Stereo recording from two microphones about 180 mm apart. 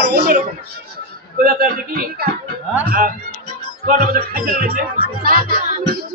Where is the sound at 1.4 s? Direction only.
55° right (ahead or behind).